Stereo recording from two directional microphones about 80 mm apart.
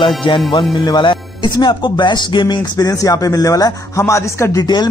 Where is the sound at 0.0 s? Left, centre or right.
Left.